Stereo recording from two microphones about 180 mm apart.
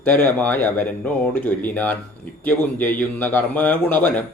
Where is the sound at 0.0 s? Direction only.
10° left (ahead or behind).